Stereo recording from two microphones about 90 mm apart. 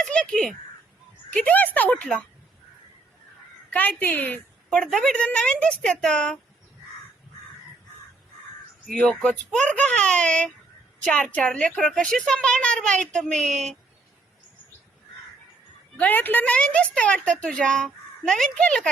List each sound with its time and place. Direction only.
0.0 s a woman's voice: 10° left (ahead or behind)
3.7 s a woman's voice: 20° left (ahead or behind)
4.7 s a woman's voice: 5° left (ahead or behind)
8.9 s a woman's voice: 10° left (ahead or behind)
16.0 s a woman's voice: 20° left (ahead or behind)